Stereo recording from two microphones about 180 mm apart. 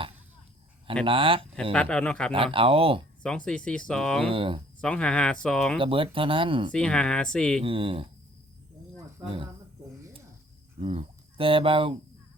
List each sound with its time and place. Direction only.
1.0 s speech: 30° right (ahead or behind)
1.7 s speech: 5° left (ahead or behind)
2.3 s speech: 30° right (ahead or behind)
3.2 s speech: 5° left (ahead or behind)
4.2 s speech: 30° right (ahead or behind)
4.8 s speech: 5° left (ahead or behind)
5.8 s speech: 30° right (ahead or behind)
6.7 s speech: 5° left (ahead or behind)
7.6 s speech: 30° right (ahead or behind)
10.8 s speech: 30° right (ahead or behind)